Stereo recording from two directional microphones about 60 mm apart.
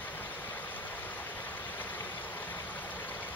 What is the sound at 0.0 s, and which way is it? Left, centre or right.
Vehicle, left.